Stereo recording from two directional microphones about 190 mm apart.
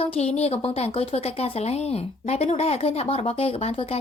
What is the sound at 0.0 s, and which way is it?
Speech, 30° left (ahead or behind).